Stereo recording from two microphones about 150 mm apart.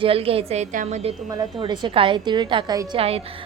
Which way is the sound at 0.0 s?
40° right (ahead or behind).